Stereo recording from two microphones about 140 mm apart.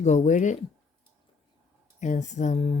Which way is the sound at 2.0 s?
60° left (ahead or behind).